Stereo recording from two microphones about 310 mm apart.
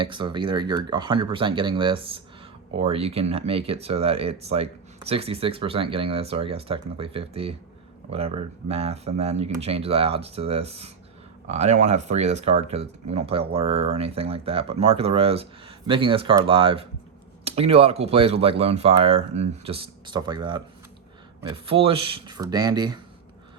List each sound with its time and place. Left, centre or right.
0.0 s speech: centre